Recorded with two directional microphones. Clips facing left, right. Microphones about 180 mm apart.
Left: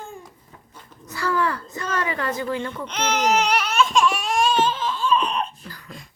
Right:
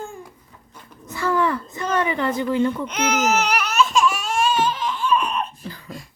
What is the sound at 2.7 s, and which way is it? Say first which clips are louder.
Speech: right 2 dB; 10° right (ahead or behind).